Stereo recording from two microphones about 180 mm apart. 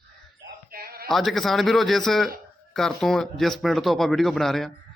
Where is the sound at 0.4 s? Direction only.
55° right (ahead or behind).